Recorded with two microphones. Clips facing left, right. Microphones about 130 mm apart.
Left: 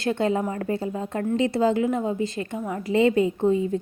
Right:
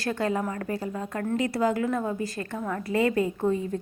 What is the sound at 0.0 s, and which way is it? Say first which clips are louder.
A woman's voice: left 4 dB; 25° left (ahead or behind).